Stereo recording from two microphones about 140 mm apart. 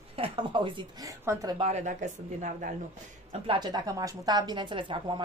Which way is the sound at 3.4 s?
35° right (ahead or behind).